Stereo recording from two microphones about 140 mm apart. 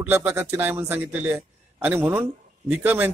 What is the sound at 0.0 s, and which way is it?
A man's voice, 15° right (ahead or behind).